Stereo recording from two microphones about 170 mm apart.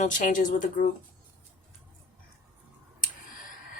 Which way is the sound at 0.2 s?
50° left (ahead or behind).